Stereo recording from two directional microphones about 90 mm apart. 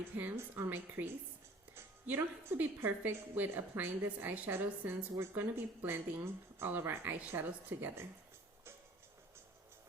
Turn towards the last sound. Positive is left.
turn(degrees=-20)  # may be behind; listen again after turning